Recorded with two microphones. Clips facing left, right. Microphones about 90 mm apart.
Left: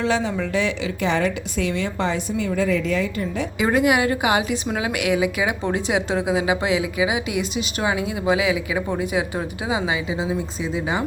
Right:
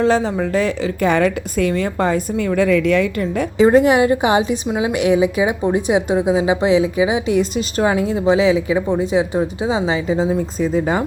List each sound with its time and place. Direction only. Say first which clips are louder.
0.0 s a woman's voice: right 6 dB; 35° right (ahead or behind); by 3.4 s 60° right (ahead or behind)
3.6 s a woman's voice: right 7 dB; 30° right (ahead or behind)
10.1 s a woman's voice: right 7 dB; 45° right (ahead or behind)